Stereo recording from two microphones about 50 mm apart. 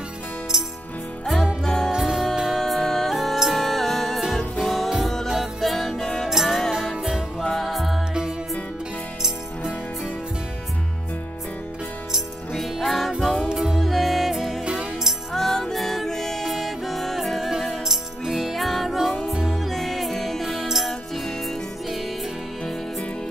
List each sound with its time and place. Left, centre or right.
1.6 s music: centre
1.9 s music: centre
7.4 s music: centre
12.5 s music: centre
14.6 s music: centre
15.3 s music: centre